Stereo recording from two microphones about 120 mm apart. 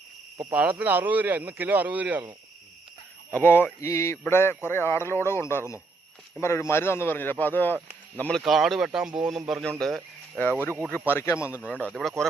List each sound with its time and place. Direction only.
0.5 s speech: 10° right (ahead or behind)
3.3 s a man's voice: 15° left (ahead or behind)
8.4 s speech: centre (ahead or behind)
10.8 s a man's voice: 15° left (ahead or behind)